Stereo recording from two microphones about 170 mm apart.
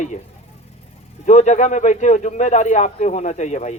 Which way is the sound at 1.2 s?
45° left (ahead or behind).